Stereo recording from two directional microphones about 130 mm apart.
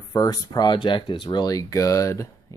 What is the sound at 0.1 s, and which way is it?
Speech, 30° left (ahead or behind).